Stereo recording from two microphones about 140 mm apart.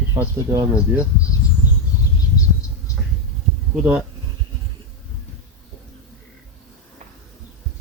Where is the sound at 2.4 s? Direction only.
25° left (ahead or behind).